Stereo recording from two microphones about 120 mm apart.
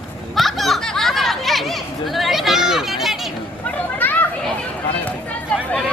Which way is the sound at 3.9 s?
15° left (ahead or behind).